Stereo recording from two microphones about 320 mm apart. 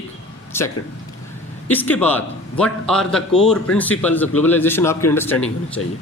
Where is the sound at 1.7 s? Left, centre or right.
Centre.